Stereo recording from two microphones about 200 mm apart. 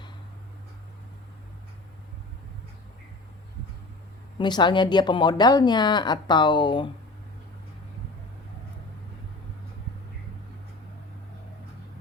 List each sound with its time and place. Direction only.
4.4 s speech: 20° left (ahead or behind)